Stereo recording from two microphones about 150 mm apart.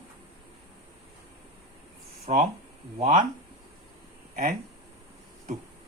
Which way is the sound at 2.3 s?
50° right (ahead or behind).